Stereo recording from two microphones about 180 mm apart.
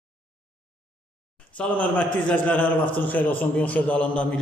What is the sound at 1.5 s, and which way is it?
A man's voice, 10° left (ahead or behind).